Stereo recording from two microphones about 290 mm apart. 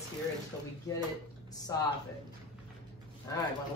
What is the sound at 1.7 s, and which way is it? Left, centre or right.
Speech, centre.